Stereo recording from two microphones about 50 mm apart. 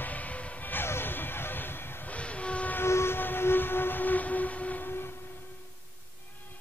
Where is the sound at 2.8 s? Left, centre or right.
Left.